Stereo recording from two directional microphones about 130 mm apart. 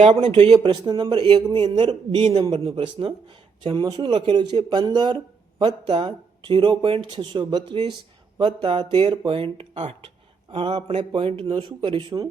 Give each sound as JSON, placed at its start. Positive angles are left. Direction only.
{"t": 0.0, "sound": "a man's voice", "side_deg": -45}